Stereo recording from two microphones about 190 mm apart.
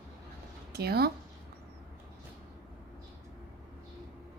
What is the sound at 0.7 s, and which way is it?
Speech, 55° right (ahead or behind).